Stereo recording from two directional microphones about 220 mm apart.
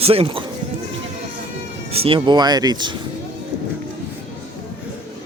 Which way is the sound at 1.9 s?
25° right (ahead or behind).